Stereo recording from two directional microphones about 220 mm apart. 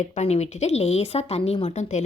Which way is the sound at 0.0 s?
30° left (ahead or behind).